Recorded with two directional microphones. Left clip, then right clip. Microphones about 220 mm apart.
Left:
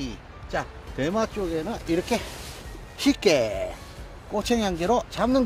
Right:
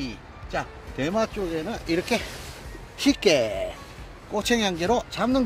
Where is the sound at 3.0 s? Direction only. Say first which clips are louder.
Even; centre (ahead or behind).